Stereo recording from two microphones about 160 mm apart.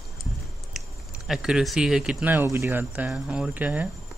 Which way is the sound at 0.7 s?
Centre (ahead or behind).